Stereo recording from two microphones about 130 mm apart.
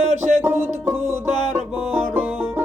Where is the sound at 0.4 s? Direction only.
15° right (ahead or behind).